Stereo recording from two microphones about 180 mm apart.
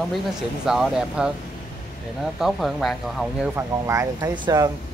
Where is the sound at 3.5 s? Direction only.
20° right (ahead or behind).